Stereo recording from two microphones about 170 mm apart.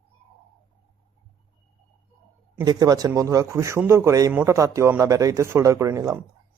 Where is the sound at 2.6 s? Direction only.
25° right (ahead or behind).